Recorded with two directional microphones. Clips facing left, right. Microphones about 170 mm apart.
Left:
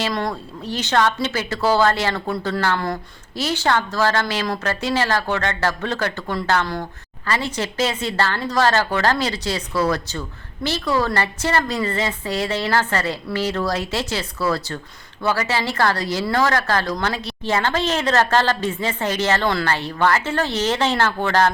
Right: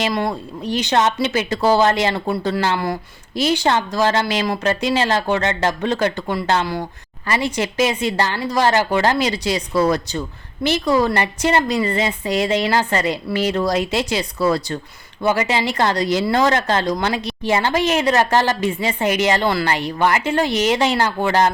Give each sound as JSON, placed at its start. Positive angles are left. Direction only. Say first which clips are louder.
{"t": 0.0, "sound": "speech", "louder": "right 3 dB", "side_deg": -10}